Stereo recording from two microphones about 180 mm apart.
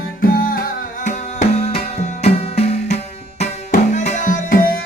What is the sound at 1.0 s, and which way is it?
Music, 40° left (ahead or behind).